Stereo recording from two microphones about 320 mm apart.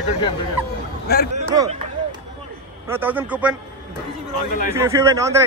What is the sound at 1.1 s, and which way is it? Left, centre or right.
Speech, left.